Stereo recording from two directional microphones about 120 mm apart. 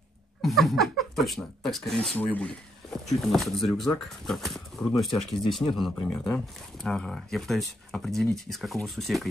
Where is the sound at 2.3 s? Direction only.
10° left (ahead or behind).